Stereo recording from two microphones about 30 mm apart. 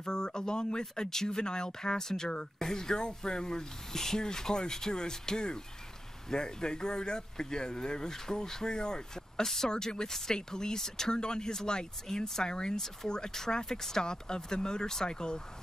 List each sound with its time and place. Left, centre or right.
0.0 s speech: left
12.7 s speech: centre
14.0 s speech: left